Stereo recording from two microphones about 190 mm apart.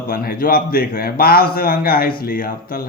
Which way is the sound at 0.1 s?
50° left (ahead or behind).